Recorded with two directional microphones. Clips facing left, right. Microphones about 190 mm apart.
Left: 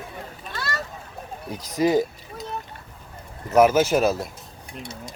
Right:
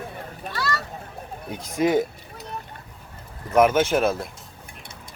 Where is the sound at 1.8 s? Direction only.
Centre (ahead or behind).